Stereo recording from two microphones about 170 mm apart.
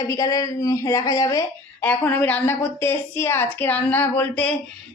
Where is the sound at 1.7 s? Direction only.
10° left (ahead or behind).